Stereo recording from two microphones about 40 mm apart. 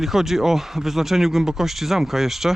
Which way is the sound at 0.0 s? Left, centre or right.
Centre.